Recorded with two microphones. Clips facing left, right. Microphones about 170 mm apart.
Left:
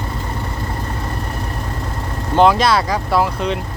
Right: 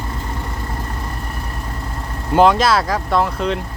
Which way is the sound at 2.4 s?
Centre (ahead or behind).